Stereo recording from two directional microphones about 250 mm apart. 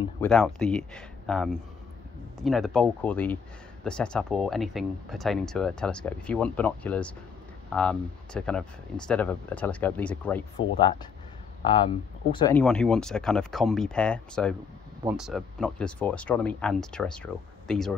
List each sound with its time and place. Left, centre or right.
0.2 s speech: centre
10.8 s speech: centre
12.5 s speech: centre